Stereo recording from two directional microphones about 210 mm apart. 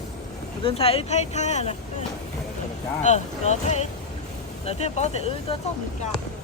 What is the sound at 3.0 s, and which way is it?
Speech, 35° left (ahead or behind).